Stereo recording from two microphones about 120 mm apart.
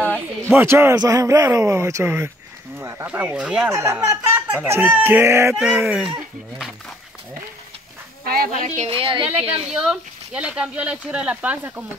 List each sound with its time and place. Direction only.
0.5 s a man's voice: 20° right (ahead or behind)
3.7 s a man's voice: 25° right (ahead or behind)
5.8 s speech: 10° right (ahead or behind)
8.6 s a woman's voice: 75° right (ahead or behind)
8.9 s a woman's voice: 50° right (ahead or behind)
9.7 s speech: 5° right (ahead or behind)